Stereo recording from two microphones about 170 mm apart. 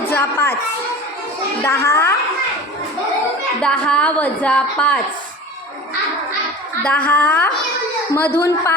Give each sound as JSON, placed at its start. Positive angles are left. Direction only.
{"t": 0.1, "sound": "speech", "side_deg": 15}
{"t": 1.6, "sound": "a woman's voice", "side_deg": 15}
{"t": 3.6, "sound": "a woman's voice", "side_deg": 5}
{"t": 6.8, "sound": "a woman's voice", "side_deg": 10}